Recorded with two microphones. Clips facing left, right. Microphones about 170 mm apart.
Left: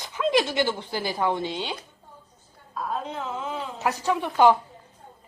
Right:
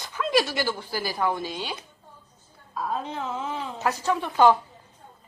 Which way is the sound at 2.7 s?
Centre (ahead or behind).